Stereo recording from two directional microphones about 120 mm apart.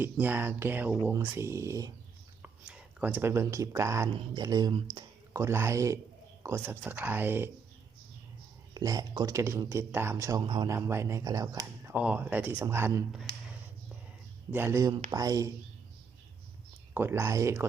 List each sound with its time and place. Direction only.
0.0 s speech: 15° right (ahead or behind)
1.1 s speech: 25° right (ahead or behind)
2.4 s speech: 15° right (ahead or behind)
4.1 s speech: 35° right (ahead or behind)
5.3 s speech: 25° right (ahead or behind)
8.7 s speech: 30° right (ahead or behind)
10.4 s speech: 40° right (ahead or behind)
10.7 s speech: 20° right (ahead or behind)
14.5 s speech: 20° right (ahead or behind)
16.9 s speech: 20° right (ahead or behind)